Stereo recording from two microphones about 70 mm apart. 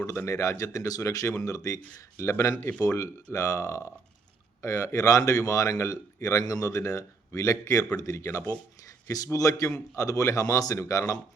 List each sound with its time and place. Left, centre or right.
0.3 s a man's voice: left
9.0 s a man's voice: left